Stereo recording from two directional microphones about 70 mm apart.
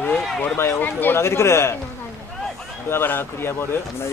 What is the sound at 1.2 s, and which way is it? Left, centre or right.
Speech, left.